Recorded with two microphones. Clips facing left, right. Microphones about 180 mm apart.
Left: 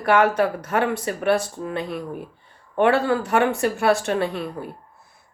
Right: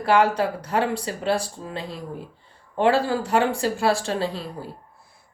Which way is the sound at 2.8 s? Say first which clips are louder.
Left 1 dB; 25° right (ahead or behind).